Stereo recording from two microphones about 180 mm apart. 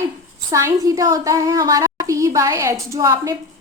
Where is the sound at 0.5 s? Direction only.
20° right (ahead or behind).